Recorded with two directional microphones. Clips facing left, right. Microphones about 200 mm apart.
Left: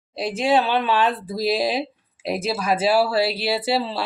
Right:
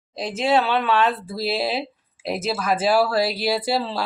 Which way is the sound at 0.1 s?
10° left (ahead or behind).